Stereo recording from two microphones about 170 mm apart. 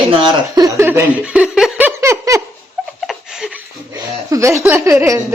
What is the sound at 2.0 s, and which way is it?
Giggle, 15° right (ahead or behind).